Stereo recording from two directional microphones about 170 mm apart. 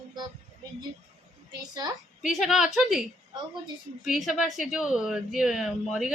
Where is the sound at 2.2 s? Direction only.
5° right (ahead or behind).